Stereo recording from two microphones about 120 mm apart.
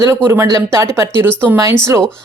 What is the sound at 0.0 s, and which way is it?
Speech, 20° right (ahead or behind).